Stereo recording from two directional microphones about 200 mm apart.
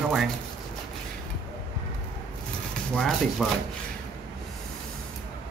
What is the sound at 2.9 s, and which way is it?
Speech, 5° left (ahead or behind).